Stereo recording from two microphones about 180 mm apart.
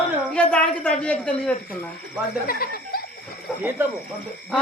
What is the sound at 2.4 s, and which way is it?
Speech, 55° left (ahead or behind).